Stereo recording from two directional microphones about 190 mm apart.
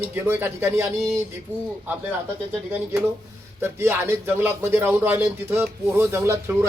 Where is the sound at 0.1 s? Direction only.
10° right (ahead or behind).